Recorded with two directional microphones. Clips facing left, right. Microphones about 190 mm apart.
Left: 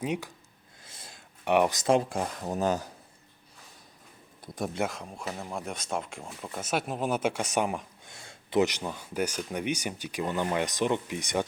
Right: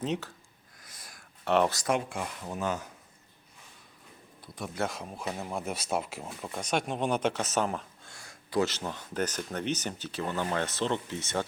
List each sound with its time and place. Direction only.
0.0 s speech: 10° left (ahead or behind)
0.9 s a sound: 25° left (ahead or behind)
1.5 s speech: 15° left (ahead or behind)
1.9 s speech: 35° left (ahead or behind)
4.9 s speech: centre (ahead or behind); by 11.4 s 15° left (ahead or behind)